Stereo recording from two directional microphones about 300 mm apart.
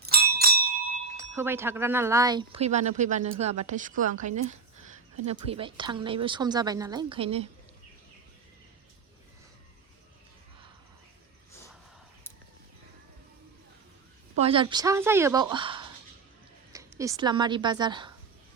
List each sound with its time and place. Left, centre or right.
0.0 s bell: right
1.4 s speech: centre; by 4.1 s right
5.2 s a woman's voice: centre
14.3 s a woman's voice: centre